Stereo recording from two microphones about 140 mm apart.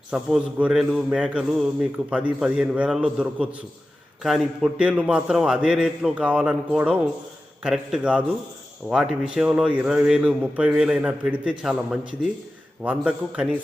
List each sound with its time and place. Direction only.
0.1 s a man's voice: 5° right (ahead or behind)